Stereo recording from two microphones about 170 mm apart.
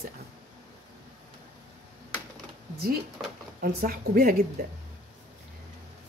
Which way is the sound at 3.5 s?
60° right (ahead or behind).